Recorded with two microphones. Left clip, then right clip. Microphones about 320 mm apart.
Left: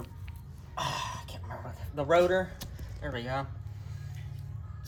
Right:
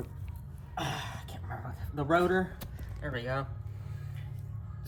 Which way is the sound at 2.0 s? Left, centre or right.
Centre.